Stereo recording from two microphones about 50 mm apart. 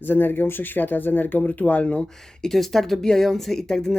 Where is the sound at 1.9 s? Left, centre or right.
Centre.